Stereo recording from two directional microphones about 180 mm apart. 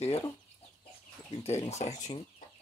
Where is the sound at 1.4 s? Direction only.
35° left (ahead or behind).